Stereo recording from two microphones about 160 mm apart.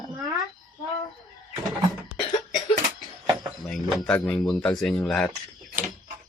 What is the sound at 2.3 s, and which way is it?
Cough, 25° left (ahead or behind).